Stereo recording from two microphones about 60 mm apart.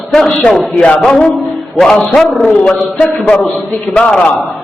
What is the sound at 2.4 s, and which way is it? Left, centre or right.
Speech, left.